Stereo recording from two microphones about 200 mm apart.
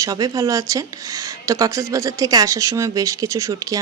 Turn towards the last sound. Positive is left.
turn(degrees=-15)  # may be behind; listen again after turning